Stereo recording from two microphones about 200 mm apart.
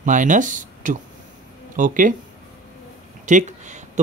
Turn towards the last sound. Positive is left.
turn(degrees=-35)  # may be behind; listen again after turning